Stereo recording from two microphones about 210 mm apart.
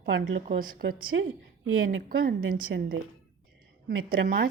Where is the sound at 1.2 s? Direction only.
75° right (ahead or behind).